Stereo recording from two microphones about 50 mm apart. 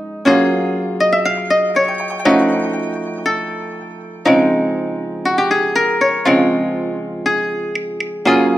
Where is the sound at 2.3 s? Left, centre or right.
Left.